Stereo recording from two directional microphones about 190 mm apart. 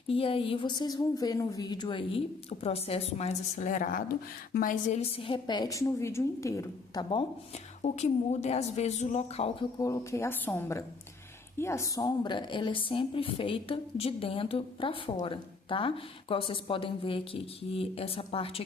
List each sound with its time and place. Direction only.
0.1 s a woman's voice: 30° left (ahead or behind)
7.8 s a woman's voice: 35° left (ahead or behind)
9.7 s a woman's voice: 15° left (ahead or behind)